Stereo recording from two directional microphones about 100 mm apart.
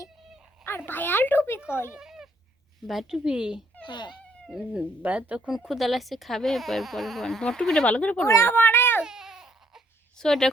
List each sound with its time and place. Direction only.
0.9 s a child's voice: 20° left (ahead or behind)
2.0 s a sound: 5° right (ahead or behind)
2.8 s speech: centre (ahead or behind)
3.8 s speech: 50° left (ahead or behind)
4.2 s cat: 10° left (ahead or behind)
4.5 s speech: 10° right (ahead or behind)
5.5 s speech: centre (ahead or behind)
8.3 s speech: 25° left (ahead or behind)
9.0 s baby cry: 5° right (ahead or behind)
10.2 s speech: 5° left (ahead or behind)